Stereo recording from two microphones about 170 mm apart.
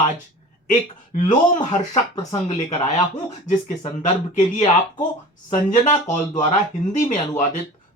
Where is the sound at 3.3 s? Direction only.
45° left (ahead or behind).